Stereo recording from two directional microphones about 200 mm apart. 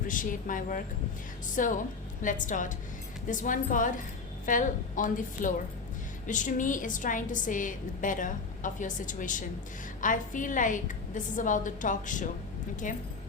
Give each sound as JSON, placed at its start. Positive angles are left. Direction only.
{"t": 0.1, "sound": "a woman's voice", "side_deg": 40}